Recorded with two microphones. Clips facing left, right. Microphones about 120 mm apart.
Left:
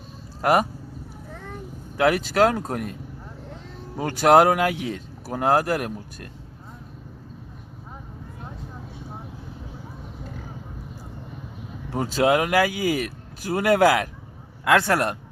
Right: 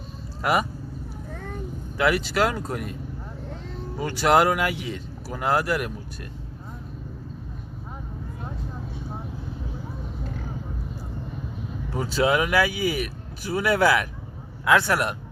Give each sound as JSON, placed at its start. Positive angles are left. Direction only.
{"t": 0.4, "sound": "speech", "side_deg": 50}
{"t": 2.0, "sound": "speech", "side_deg": 50}
{"t": 3.9, "sound": "speech", "side_deg": 50}
{"t": 11.9, "sound": "speech", "side_deg": 50}